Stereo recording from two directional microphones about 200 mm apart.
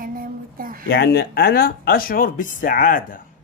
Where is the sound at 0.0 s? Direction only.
45° right (ahead or behind).